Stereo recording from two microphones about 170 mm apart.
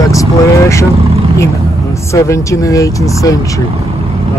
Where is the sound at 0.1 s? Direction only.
20° left (ahead or behind).